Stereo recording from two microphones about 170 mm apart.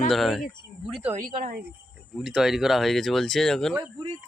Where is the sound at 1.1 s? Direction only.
50° right (ahead or behind).